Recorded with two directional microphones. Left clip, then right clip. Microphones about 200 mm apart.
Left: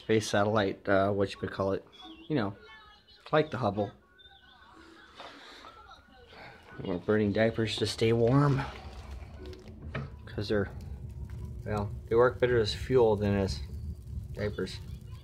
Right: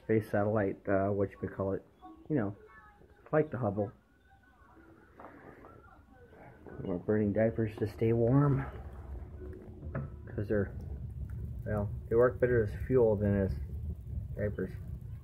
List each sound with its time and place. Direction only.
0.0 s speech: 15° left (ahead or behind)
6.4 s speech: 15° left (ahead or behind)
10.2 s speech: 10° left (ahead or behind)